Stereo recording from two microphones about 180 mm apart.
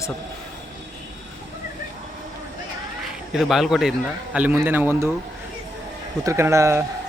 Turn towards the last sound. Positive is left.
turn(degrees=-15)  # may be behind; listen again after turning